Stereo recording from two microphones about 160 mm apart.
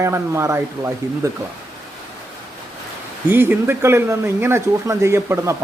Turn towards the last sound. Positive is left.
turn(degrees=-15)  # may be behind; listen again after turning